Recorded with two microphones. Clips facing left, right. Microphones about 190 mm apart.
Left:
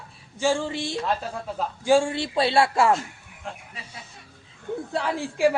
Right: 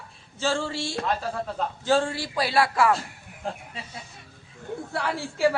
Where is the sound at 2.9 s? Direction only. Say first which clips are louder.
Left 1 dB; 35° right (ahead or behind).